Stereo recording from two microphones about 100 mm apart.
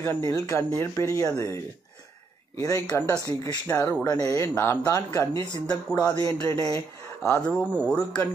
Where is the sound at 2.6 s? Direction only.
35° left (ahead or behind).